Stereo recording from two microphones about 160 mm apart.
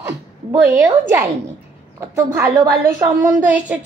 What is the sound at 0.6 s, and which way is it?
Speech, 10° right (ahead or behind).